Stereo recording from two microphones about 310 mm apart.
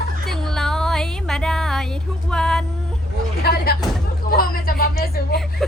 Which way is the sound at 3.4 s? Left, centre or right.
Left.